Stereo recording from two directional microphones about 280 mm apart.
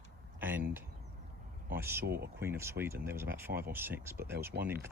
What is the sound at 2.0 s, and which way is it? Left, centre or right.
Speech, right.